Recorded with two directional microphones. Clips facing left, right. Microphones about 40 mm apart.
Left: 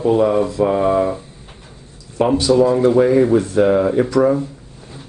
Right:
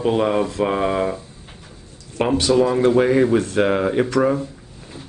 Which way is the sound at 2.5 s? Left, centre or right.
Right.